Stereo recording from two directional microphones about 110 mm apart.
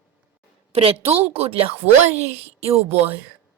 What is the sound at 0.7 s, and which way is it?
A woman's voice, 60° right (ahead or behind).